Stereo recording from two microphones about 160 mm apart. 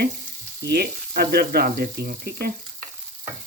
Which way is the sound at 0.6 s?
85° right.